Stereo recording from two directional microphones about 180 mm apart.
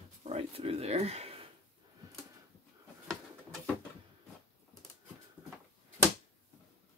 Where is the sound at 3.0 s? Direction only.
Centre (ahead or behind).